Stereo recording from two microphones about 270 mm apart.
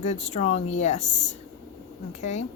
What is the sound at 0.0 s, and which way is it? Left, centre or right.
Speech, left.